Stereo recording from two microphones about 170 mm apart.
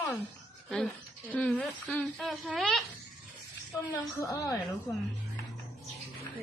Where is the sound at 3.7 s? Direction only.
20° left (ahead or behind).